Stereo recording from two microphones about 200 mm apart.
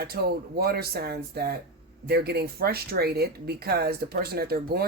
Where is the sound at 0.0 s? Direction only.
50° right (ahead or behind).